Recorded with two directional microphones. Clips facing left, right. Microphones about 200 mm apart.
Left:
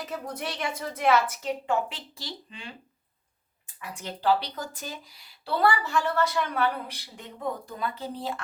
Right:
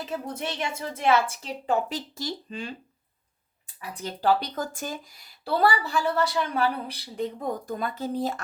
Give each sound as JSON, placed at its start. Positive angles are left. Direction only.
{"t": 0.3, "sound": "speech", "side_deg": -25}
{"t": 3.8, "sound": "speech", "side_deg": -35}
{"t": 7.7, "sound": "speech", "side_deg": -45}